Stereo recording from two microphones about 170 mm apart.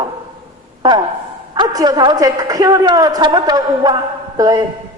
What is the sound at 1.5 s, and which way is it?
A woman's voice, 25° right (ahead or behind).